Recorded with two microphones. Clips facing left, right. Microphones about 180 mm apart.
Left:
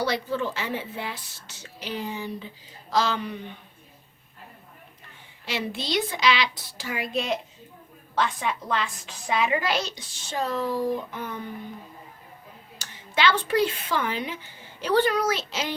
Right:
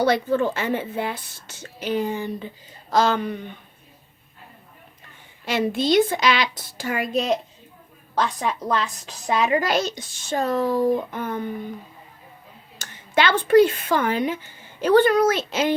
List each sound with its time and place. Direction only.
0.0 s a child's voice: 50° right (ahead or behind)
5.5 s a child's voice: 50° right (ahead or behind)
12.8 s speech: 50° right (ahead or behind)